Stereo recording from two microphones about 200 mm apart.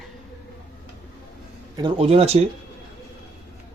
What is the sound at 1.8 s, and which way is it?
Speech, 30° right (ahead or behind).